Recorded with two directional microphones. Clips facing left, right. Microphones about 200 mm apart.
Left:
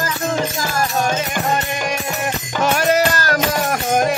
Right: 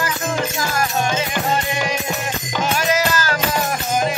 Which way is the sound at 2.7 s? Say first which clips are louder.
Left 3 dB; 60° left (ahead or behind).